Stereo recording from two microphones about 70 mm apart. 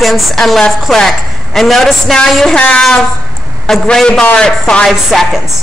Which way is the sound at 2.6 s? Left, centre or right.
Centre.